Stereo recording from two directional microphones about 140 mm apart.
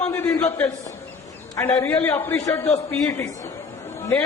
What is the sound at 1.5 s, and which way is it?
A man's voice, 15° left (ahead or behind).